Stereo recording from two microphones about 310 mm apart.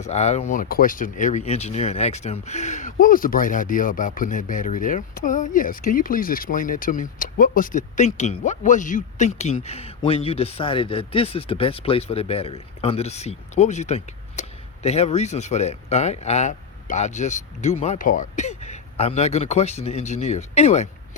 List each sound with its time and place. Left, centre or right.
0.0 s speech: left